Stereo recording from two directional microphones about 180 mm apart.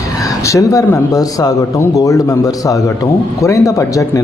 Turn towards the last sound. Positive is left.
turn(degrees=20)  # may be behind; listen again after turning